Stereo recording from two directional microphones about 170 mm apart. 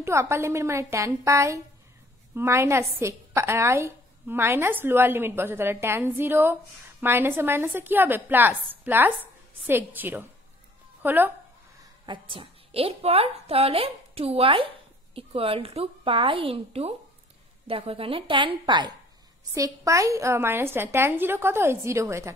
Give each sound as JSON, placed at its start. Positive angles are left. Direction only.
{"t": 0.0, "sound": "a woman's voice", "side_deg": -15}
{"t": 11.8, "sound": "a woman's voice", "side_deg": -30}